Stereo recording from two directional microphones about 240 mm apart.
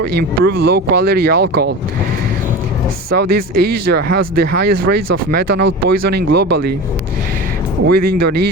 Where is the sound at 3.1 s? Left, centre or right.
Right.